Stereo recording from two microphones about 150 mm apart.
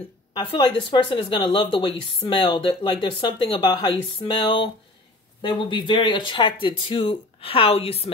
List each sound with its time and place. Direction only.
0.3 s speech: 30° left (ahead or behind)